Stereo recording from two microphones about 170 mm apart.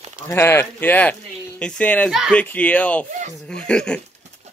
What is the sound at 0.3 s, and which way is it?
Speech, 15° left (ahead or behind).